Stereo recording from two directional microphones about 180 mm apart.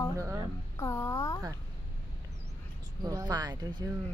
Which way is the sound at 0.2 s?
15° right (ahead or behind).